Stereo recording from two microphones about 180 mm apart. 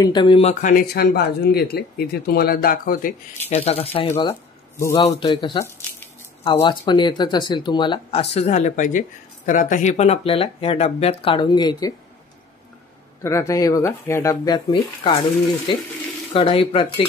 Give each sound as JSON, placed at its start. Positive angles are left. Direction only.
{"t": 0.0, "sound": "speech", "side_deg": 25}
{"t": 3.4, "sound": "speech", "side_deg": 35}
{"t": 4.3, "sound": "a sound", "side_deg": 15}
{"t": 5.2, "sound": "speech", "side_deg": 25}
{"t": 13.2, "sound": "speech", "side_deg": 15}